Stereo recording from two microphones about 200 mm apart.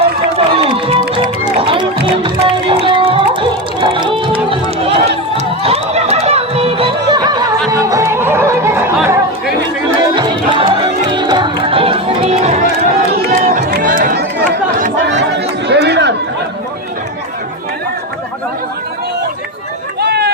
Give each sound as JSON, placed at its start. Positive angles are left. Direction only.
{"t": 0.3, "sound": "music", "side_deg": -25}
{"t": 10.2, "sound": "music", "side_deg": -25}
{"t": 15.0, "sound": "chatter", "side_deg": -60}
{"t": 20.0, "sound": "a sound", "side_deg": -55}